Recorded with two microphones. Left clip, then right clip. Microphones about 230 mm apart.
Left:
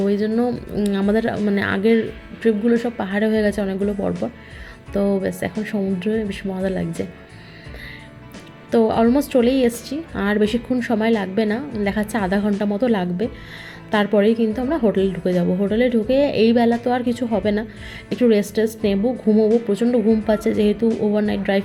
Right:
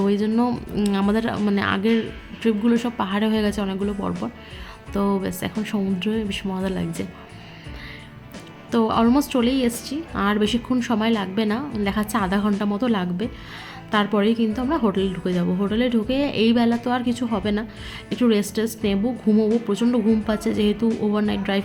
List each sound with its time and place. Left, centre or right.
0.0 s speech: centre
8.7 s speech: centre